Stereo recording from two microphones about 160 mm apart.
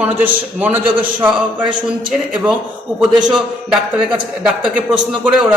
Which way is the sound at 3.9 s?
5° right (ahead or behind).